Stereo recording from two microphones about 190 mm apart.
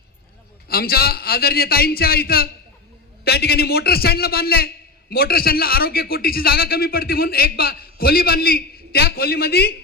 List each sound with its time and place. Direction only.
0.7 s a man's voice: 55° left (ahead or behind)